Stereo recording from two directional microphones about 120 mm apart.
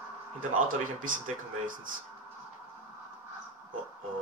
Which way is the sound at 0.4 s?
90° right.